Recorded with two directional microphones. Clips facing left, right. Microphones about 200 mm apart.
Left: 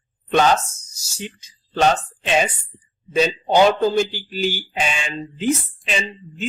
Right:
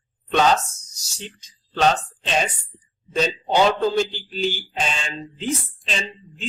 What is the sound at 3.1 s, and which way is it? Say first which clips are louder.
A man's voice: left 4 dB; 10° left (ahead or behind).